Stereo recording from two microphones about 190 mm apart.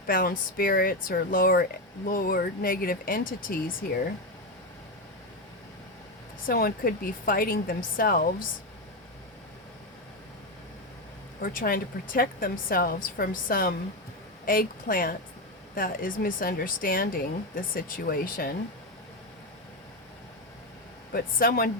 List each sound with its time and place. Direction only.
0.1 s speech: 50° left (ahead or behind)
6.5 s speech: 50° left (ahead or behind)
11.4 s speech: 50° left (ahead or behind)
21.1 s speech: 50° left (ahead or behind)